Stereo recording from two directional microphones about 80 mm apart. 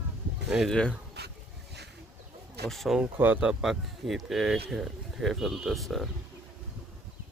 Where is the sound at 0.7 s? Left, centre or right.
Centre.